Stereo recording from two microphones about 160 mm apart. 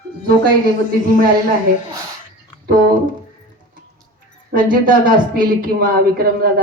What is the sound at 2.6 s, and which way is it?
Speech, 75° right (ahead or behind).